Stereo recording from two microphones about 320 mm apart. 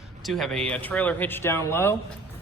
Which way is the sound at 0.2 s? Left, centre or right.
Centre.